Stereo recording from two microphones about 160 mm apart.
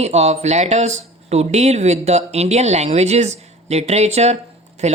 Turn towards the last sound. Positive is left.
turn(degrees=-45)  # may be behind; listen again after turning